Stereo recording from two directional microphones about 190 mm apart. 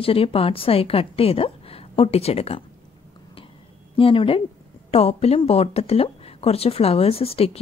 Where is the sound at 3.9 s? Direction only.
30° left (ahead or behind).